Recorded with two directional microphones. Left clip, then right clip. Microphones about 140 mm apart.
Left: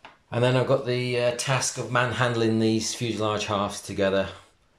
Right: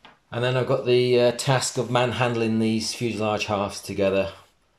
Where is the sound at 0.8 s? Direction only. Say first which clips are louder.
Right 7 dB; 20° right (ahead or behind).